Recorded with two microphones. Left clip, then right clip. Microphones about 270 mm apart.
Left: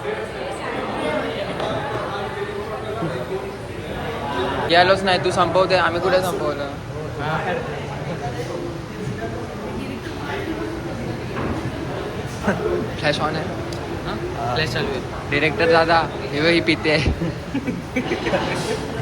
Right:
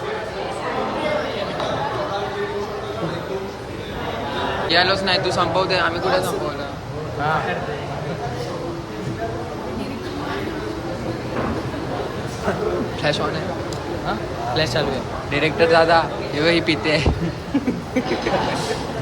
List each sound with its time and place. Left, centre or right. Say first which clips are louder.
4.7 s a man's voice: left 3 dB; centre
13.0 s speech: left 1 dB; centre
14.5 s speech: right 3 dB; right
15.3 s speech: even; centre